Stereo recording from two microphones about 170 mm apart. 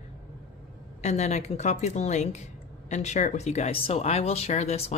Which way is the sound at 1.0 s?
40° left (ahead or behind).